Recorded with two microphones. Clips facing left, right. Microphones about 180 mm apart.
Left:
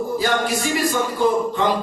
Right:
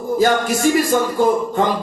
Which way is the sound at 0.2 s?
45° right (ahead or behind).